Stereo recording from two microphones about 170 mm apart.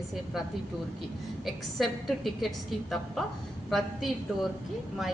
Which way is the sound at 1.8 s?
Centre (ahead or behind).